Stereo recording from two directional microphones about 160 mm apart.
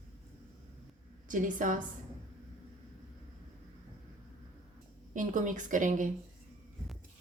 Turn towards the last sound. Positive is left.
turn(degrees=-55)  # may be behind; listen again after turning